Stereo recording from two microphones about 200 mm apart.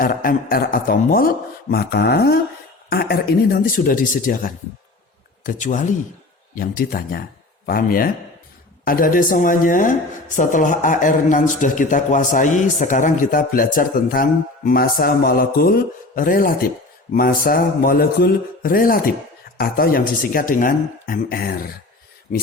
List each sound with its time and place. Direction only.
0.0 s a woman's voice: 45° left (ahead or behind)